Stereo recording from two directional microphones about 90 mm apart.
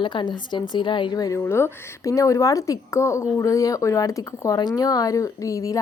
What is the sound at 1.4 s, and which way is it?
Speech, 30° left (ahead or behind).